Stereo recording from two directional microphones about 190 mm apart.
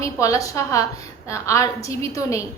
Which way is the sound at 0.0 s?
15° left (ahead or behind).